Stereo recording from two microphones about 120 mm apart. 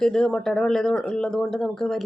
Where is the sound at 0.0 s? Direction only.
5° left (ahead or behind).